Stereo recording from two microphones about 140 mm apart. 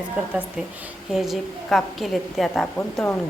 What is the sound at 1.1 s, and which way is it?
A woman's voice, centre (ahead or behind).